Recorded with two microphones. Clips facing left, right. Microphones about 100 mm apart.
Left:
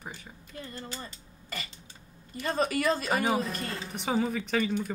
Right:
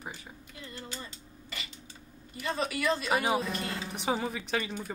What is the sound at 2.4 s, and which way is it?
Speech, 40° left (ahead or behind).